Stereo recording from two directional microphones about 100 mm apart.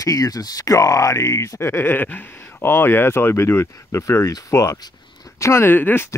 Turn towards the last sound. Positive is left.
turn(degrees=20)  # may be behind; listen again after turning